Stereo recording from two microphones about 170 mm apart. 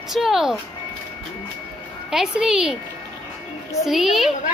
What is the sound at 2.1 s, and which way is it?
Speech, 5° right (ahead or behind).